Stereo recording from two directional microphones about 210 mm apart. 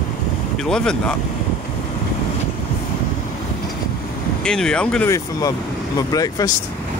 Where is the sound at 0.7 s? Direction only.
5° left (ahead or behind).